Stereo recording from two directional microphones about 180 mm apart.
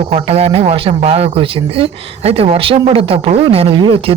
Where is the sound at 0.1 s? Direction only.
35° right (ahead or behind).